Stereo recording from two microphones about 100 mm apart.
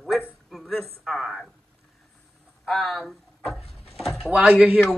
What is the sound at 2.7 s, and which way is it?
Door, centre (ahead or behind).